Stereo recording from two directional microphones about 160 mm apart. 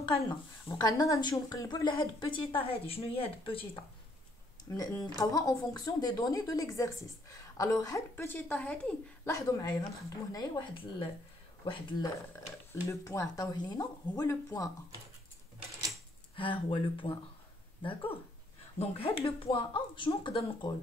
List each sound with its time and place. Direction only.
0.2 s speech: 20° left (ahead or behind)
4.6 s speech: 20° left (ahead or behind)
9.3 s speech: 20° left (ahead or behind)
13.0 s speech: 20° left (ahead or behind)
16.3 s speech: 30° left (ahead or behind)
18.8 s speech: 35° left (ahead or behind)